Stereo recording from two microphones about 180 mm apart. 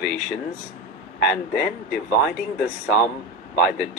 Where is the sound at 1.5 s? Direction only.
Centre (ahead or behind).